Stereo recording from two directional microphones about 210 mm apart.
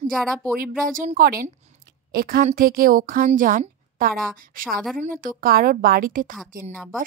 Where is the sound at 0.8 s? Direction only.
40° right (ahead or behind).